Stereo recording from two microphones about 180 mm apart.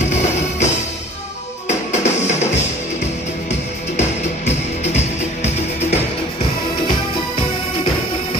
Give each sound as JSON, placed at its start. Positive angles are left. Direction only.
{"t": 1.7, "sound": "music", "side_deg": 40}
{"t": 4.5, "sound": "music", "side_deg": 40}